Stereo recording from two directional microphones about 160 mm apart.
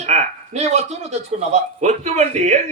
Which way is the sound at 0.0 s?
45° right (ahead or behind).